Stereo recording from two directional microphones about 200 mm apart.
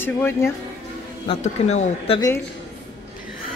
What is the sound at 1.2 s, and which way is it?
Speech, 30° left (ahead or behind).